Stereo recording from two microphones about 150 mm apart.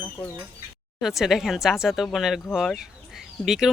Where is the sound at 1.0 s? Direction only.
Centre (ahead or behind).